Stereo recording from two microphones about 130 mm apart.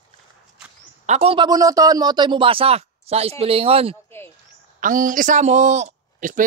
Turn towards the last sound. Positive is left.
turn(degrees=-85)